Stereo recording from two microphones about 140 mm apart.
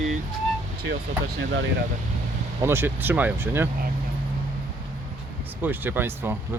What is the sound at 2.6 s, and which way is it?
Speech, 15° right (ahead or behind).